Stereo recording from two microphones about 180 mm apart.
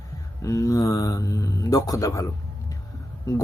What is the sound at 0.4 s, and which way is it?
Speech, 20° left (ahead or behind).